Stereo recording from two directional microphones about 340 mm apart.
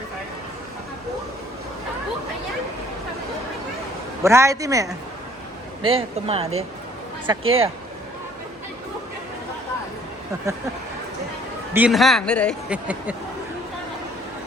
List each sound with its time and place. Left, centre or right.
4.2 s speech: centre
10.3 s speech: centre
11.7 s a man's voice: centre